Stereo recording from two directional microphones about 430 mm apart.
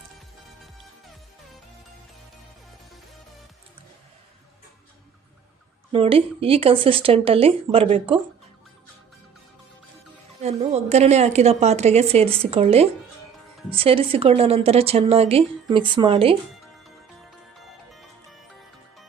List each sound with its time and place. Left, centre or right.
5.9 s a woman's voice: centre
10.4 s a woman's voice: centre
17.6 s music: centre